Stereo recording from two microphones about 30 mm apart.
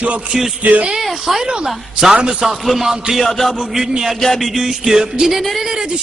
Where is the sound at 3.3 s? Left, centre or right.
Centre.